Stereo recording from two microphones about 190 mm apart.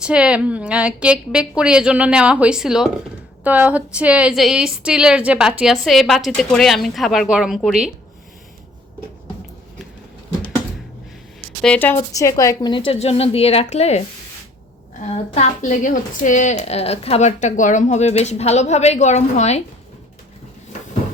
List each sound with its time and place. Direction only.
0.0 s a woman's voice: 5° right (ahead or behind)
11.6 s a woman's voice: 10° left (ahead or behind); by 14.0 s 35° left (ahead or behind)
15.1 s a woman's voice: 40° left (ahead or behind)